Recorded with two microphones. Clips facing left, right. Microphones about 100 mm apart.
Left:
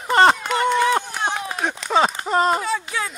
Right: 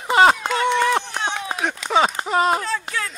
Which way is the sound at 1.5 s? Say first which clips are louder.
Even; centre (ahead or behind).